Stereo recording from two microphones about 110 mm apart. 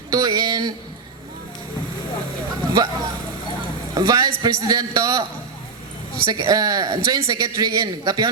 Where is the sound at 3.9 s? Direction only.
35° right (ahead or behind).